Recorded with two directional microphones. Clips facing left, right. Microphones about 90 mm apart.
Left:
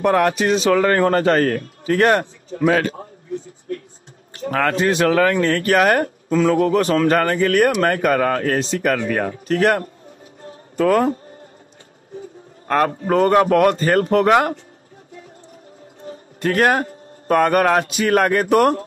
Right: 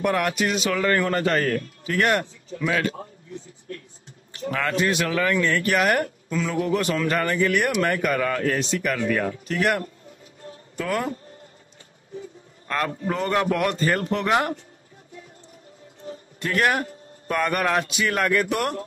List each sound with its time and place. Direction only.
0.0 s a man's voice: 40° left (ahead or behind)
4.3 s a man's voice: 45° left (ahead or behind)
12.6 s a man's voice: 45° left (ahead or behind)
16.0 s a man's voice: 45° left (ahead or behind)